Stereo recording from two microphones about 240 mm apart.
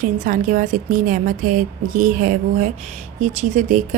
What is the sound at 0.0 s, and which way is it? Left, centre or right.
A woman's voice, right.